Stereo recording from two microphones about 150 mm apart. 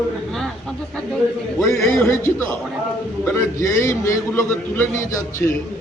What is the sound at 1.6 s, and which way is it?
A man's voice, 20° left (ahead or behind).